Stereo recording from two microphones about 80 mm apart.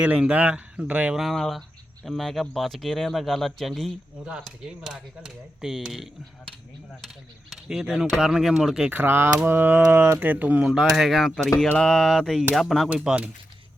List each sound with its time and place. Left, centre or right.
0.0 s speech: centre
1.1 s speech: centre
7.5 s speech: centre
8.9 s speech: right
10.7 s speech: centre
12.9 s speech: centre